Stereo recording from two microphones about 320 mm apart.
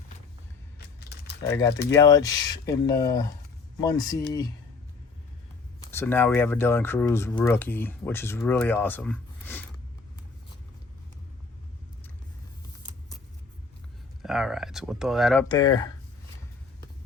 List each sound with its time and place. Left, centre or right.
0.8 s mechanisms: left
1.5 s speech: centre
5.9 s speech: centre
14.2 s speech: centre
15.4 s speech: centre